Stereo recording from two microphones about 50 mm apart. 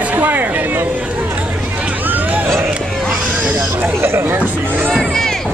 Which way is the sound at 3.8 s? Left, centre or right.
Right.